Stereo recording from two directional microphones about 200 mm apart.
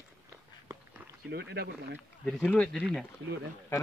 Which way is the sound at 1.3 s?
55° right (ahead or behind).